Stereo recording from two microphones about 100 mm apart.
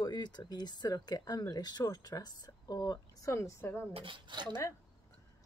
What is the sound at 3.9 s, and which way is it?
Speech, 55° right (ahead or behind).